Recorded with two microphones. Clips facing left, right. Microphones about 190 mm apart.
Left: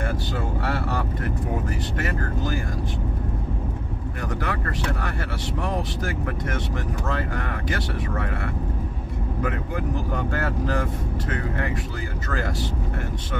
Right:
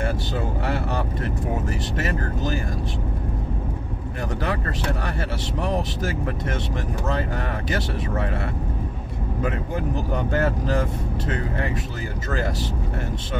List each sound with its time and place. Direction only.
0.7 s speech: 20° right (ahead or behind)
2.0 s speech: 25° right (ahead or behind)
4.4 s speech: 25° right (ahead or behind)
7.1 s speech: 20° right (ahead or behind)
10.1 s speech: 20° right (ahead or behind)